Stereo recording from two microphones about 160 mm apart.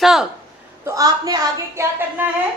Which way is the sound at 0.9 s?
20° right (ahead or behind).